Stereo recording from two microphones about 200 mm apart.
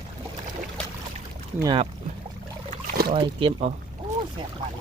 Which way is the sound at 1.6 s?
25° right (ahead or behind).